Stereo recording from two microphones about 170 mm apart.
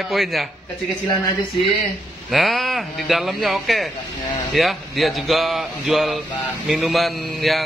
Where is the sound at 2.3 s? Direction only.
Centre (ahead or behind).